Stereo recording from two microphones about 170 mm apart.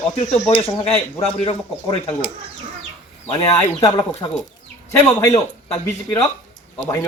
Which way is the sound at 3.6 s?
15° left (ahead or behind).